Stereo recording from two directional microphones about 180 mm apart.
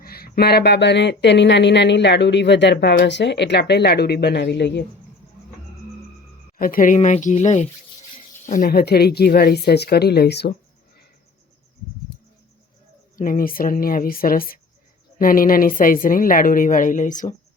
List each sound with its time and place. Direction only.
0.0 s speech: 60° left (ahead or behind)
6.6 s a woman's voice: 50° left (ahead or behind)
8.4 s speech: 50° left (ahead or behind)
13.1 s a woman's voice: 50° left (ahead or behind)